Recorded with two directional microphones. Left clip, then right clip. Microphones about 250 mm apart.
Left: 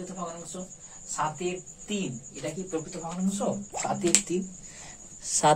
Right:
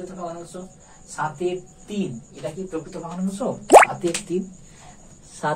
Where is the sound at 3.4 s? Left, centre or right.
Centre.